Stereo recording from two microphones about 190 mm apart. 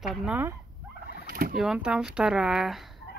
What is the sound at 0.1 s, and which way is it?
Speech, 5° right (ahead or behind).